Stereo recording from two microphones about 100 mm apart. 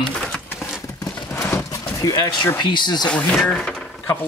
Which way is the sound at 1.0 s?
30° left (ahead or behind).